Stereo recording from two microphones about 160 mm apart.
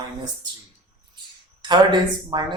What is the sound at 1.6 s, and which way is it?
Speech, 30° right (ahead or behind).